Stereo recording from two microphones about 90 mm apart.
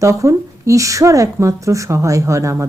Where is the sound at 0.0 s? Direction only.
35° right (ahead or behind).